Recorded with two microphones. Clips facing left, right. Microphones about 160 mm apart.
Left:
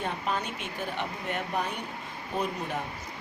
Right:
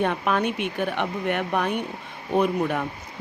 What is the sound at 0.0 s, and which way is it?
Speech, 65° right (ahead or behind).